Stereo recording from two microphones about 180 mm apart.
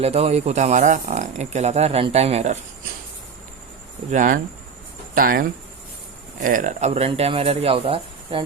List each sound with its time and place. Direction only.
0.0 s speech: 35° right (ahead or behind)
4.1 s speech: 45° right (ahead or behind)